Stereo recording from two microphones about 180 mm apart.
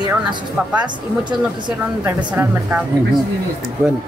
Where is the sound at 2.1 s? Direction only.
10° right (ahead or behind).